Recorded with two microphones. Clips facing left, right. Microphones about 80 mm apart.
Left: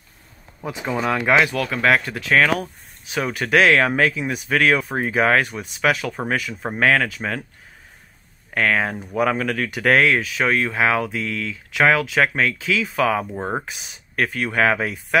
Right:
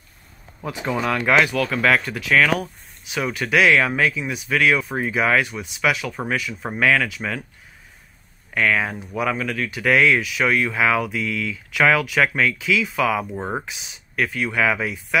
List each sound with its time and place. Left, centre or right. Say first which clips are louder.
1.0 s speech: left 1 dB; centre; by 2.5 s left
3.1 s speech: left 2 dB; left
6.7 s speech: left 1 dB; left
8.5 s speech: left 1 dB; left
10.0 s speech: even; left
13.4 s speech: left 1 dB; centre
13.7 s speech: left 1 dB; left